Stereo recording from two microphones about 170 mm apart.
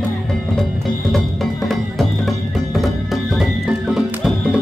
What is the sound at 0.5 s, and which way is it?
Music, centre (ahead or behind).